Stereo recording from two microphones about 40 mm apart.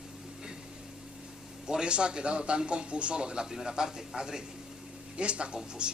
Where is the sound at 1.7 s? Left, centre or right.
Right.